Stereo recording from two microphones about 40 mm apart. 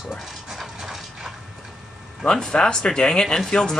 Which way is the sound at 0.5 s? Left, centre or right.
Centre.